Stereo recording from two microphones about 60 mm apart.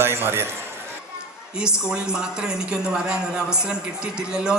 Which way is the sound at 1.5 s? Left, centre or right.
Centre.